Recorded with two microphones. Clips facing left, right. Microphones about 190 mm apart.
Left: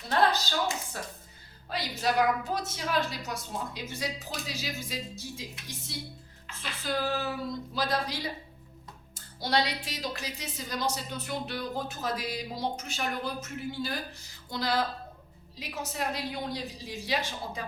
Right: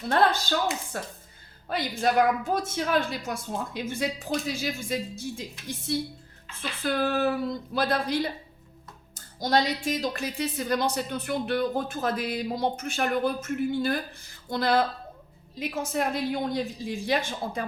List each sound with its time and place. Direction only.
0.9 s a woman's voice: 55° right (ahead or behind)